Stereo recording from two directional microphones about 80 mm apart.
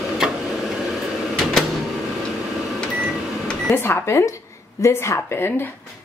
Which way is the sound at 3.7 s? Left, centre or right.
Left.